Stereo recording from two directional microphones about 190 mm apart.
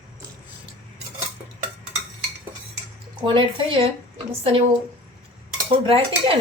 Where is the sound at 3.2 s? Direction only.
25° right (ahead or behind).